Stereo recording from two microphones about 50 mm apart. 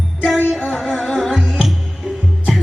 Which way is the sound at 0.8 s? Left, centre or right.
Centre.